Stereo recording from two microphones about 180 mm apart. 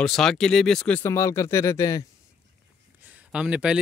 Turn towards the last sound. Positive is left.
turn(degrees=-5)  # may be behind; listen again after turning